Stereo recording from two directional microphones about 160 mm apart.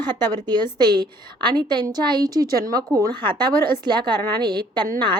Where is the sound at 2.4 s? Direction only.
70° right (ahead or behind).